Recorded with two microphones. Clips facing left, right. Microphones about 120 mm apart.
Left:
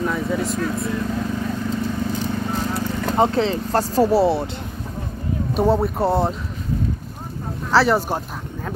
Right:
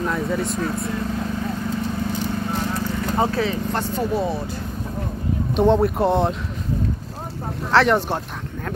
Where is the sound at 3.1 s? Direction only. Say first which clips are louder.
Left 4 dB; 25° left (ahead or behind).